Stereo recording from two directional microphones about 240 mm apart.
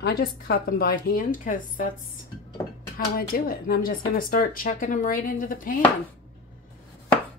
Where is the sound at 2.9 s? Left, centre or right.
Left.